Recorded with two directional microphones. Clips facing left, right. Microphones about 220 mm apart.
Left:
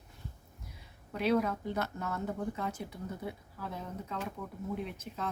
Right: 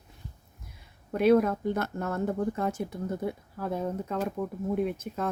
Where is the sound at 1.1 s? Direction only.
50° right (ahead or behind).